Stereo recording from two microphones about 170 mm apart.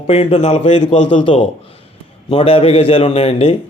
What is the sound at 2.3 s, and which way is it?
Speech, 35° left (ahead or behind).